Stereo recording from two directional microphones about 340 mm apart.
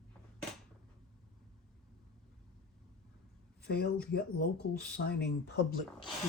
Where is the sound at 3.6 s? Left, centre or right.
Left.